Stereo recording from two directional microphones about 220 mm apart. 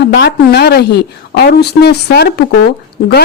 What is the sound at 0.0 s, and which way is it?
A woman's voice, 50° left (ahead or behind).